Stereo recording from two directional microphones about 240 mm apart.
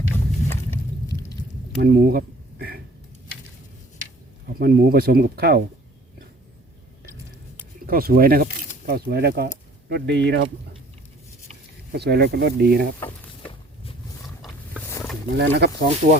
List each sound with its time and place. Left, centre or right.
0.5 s a sound: centre
1.8 s speech: right
4.5 s speech: right
7.9 s speech: right
11.9 s speech: right
13.1 s a sound: left
14.8 s roaring cats: centre
15.4 s speech: right